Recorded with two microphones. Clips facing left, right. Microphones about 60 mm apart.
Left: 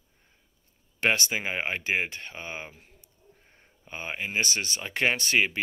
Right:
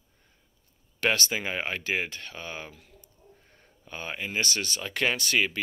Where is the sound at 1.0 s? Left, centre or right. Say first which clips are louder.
Left 1 dB; left.